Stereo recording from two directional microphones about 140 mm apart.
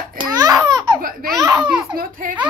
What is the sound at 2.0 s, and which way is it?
Speech, 75° right (ahead or behind).